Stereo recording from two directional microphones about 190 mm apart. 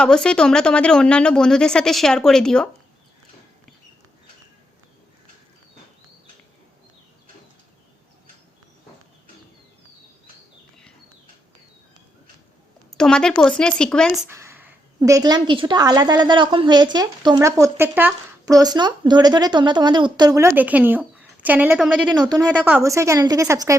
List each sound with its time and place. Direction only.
0.0 s speech: 5° left (ahead or behind)
12.9 s speech: 5° left (ahead or behind)
14.3 s a woman's voice: 15° right (ahead or behind)
22.1 s a woman's voice: 20° right (ahead or behind)